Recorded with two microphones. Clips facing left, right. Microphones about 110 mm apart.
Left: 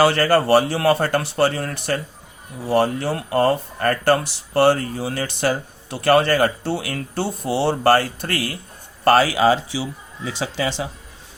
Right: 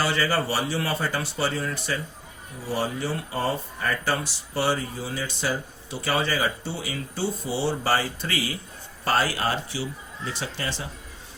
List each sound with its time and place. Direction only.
0.0 s speech: 60° left (ahead or behind)
9.0 s speech: 80° left